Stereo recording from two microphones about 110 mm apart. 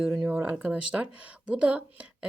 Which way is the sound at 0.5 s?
10° right (ahead or behind).